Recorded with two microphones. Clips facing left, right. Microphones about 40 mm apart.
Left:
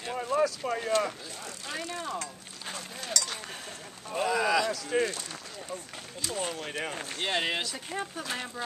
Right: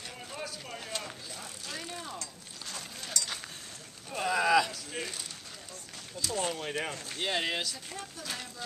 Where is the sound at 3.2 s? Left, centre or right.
Left.